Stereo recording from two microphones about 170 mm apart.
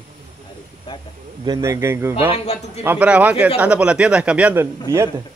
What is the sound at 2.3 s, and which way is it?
Speech, 40° left (ahead or behind).